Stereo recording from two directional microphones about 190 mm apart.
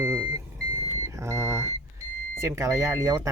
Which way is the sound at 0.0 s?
15° right (ahead or behind).